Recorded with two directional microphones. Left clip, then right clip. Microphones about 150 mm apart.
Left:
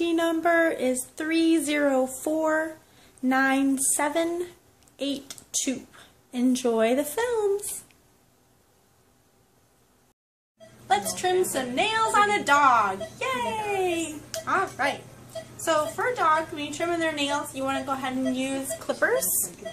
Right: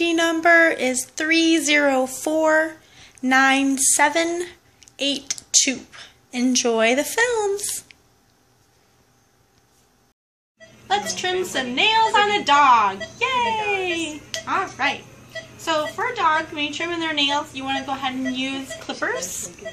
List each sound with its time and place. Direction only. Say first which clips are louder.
0.0 s speech: right 5 dB; 10° left (ahead or behind)
10.9 s a woman's voice: right 2 dB; 20° left (ahead or behind)